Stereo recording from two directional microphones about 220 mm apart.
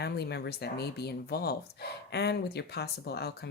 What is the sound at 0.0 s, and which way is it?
Speech, 50° left (ahead or behind).